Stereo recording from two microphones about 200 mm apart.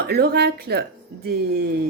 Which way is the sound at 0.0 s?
55° right (ahead or behind).